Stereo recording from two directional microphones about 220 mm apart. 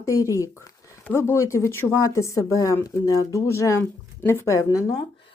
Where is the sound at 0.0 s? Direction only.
15° left (ahead or behind).